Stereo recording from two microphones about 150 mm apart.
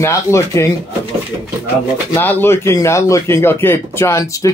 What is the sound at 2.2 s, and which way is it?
Speech, 15° left (ahead or behind).